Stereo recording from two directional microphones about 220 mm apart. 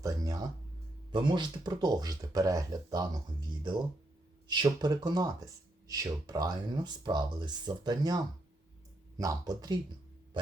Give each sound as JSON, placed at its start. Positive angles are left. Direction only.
{"t": 0.0, "sound": "music", "side_deg": -15}
{"t": 1.1, "sound": "speech", "side_deg": -20}
{"t": 4.4, "sound": "speech", "side_deg": -20}